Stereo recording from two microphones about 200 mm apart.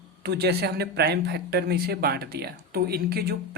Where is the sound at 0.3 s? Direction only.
55° right (ahead or behind).